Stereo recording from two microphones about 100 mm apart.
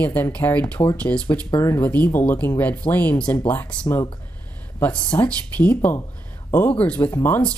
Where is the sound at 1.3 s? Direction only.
35° left (ahead or behind).